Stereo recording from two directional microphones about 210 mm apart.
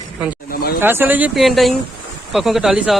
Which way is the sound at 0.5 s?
45° left (ahead or behind).